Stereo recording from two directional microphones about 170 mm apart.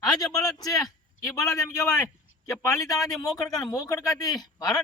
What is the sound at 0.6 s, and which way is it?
A man's voice, 20° left (ahead or behind).